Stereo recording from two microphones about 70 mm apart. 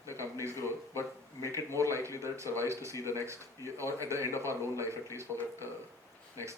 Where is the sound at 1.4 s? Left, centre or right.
Right.